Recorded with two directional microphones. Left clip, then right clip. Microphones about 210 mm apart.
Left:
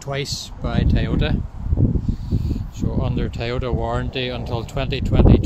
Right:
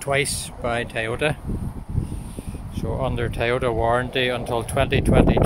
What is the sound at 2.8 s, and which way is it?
Speech, centre (ahead or behind).